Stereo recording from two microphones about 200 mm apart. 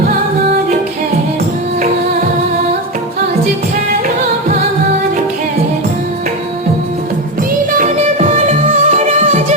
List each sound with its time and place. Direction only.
7.7 s music: 40° right (ahead or behind)